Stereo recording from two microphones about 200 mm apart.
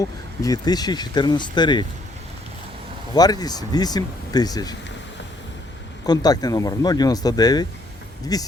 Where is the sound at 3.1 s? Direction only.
20° left (ahead or behind).